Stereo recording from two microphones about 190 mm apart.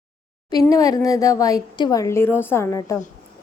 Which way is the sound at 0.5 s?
20° left (ahead or behind).